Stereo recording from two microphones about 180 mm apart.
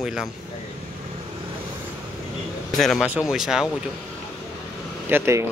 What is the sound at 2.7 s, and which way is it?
Speech, centre (ahead or behind).